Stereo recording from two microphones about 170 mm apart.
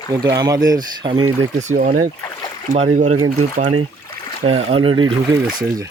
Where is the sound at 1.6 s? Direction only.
50° right (ahead or behind).